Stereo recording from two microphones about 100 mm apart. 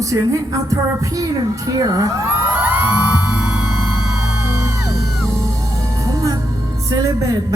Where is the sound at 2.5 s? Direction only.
15° right (ahead or behind).